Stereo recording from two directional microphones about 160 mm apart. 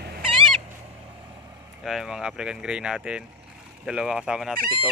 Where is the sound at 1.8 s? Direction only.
Centre (ahead or behind).